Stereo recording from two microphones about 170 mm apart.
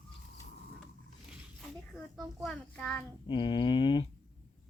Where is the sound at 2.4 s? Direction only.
5° left (ahead or behind).